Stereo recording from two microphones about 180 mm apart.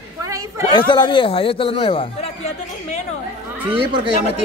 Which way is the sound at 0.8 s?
25° left (ahead or behind).